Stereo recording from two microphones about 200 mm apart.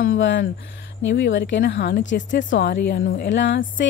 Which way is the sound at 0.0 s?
80° left.